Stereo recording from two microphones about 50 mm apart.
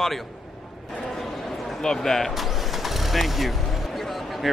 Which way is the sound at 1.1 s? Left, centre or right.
Centre.